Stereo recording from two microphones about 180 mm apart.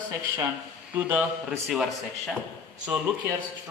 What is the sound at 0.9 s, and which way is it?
Speech, 10° right (ahead or behind).